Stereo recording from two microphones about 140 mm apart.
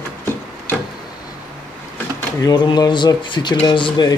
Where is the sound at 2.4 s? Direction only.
30° left (ahead or behind).